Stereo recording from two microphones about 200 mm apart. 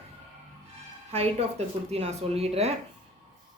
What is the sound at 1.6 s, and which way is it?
Speech, 30° right (ahead or behind).